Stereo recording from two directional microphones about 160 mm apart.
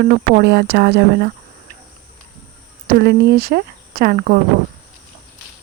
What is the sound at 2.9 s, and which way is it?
Speech, 80° right.